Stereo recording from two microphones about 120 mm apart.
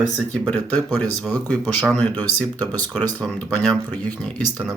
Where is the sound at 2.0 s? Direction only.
15° left (ahead or behind).